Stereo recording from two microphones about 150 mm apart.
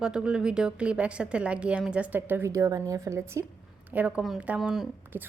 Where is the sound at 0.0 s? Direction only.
5° right (ahead or behind).